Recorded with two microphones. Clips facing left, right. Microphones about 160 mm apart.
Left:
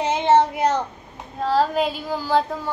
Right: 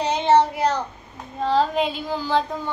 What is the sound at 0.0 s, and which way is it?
Child singing, 20° left (ahead or behind).